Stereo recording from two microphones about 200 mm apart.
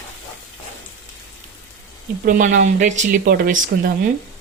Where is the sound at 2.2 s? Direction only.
40° right (ahead or behind).